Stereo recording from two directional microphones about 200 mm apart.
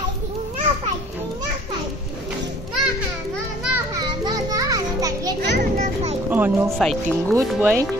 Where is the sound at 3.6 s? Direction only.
10° right (ahead or behind).